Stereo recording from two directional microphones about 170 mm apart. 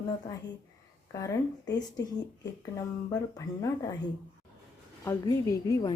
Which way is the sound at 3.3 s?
20° left (ahead or behind).